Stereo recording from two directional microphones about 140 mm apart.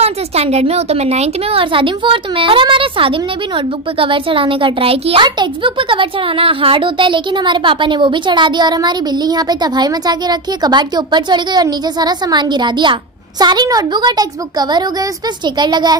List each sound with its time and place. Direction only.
0.0 s a child's voice: 50° right (ahead or behind); by 16.0 s 30° right (ahead or behind)